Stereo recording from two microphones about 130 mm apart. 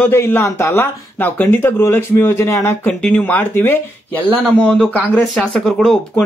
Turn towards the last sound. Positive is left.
turn(degrees=5)  # may be behind; listen again after turning